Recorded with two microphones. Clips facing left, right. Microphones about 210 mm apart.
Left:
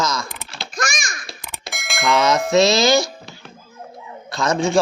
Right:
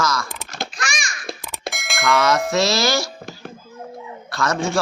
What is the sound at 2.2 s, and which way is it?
Speech, 20° left (ahead or behind).